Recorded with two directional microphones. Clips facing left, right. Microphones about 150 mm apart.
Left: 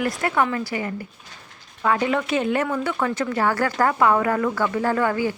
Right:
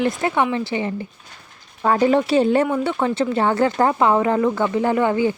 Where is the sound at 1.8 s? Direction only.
35° right (ahead or behind).